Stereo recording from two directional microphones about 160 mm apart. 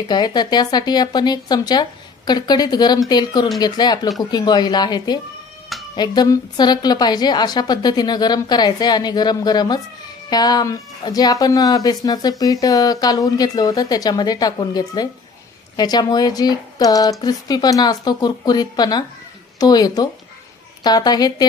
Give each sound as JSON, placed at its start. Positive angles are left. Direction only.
{"t": 0.1, "sound": "speech", "side_deg": 25}